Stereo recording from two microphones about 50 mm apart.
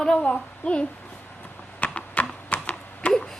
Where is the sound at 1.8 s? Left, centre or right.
Left.